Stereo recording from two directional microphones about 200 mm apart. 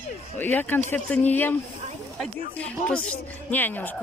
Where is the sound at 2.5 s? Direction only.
5° left (ahead or behind).